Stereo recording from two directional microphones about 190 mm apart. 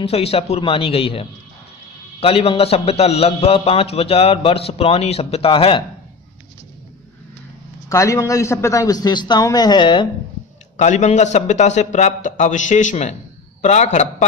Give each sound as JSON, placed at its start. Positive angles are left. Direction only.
{"t": 0.0, "sound": "a man's voice", "side_deg": 30}
{"t": 7.9, "sound": "a man's voice", "side_deg": 15}
{"t": 10.8, "sound": "a man's voice", "side_deg": 35}